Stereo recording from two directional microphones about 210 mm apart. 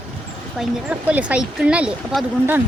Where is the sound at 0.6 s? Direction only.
5° right (ahead or behind).